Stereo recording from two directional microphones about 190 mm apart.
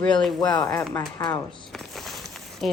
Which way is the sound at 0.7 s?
5° left (ahead or behind).